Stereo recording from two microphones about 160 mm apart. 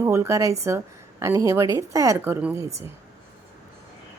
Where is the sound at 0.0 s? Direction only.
15° right (ahead or behind).